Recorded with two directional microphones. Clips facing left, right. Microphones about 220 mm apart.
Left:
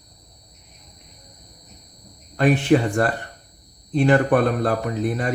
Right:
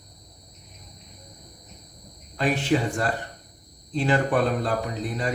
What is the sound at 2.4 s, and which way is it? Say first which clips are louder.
Speech: left 6 dB; 55° left (ahead or behind).